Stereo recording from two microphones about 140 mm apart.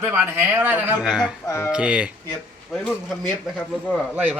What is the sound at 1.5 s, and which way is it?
Speech, 20° left (ahead or behind).